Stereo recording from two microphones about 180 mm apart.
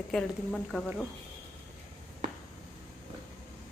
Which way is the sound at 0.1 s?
5° left (ahead or behind).